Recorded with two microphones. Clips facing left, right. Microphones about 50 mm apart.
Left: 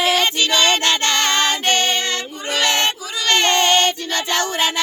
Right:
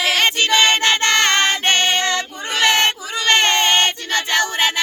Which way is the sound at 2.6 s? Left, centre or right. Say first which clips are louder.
Right 3 dB; right.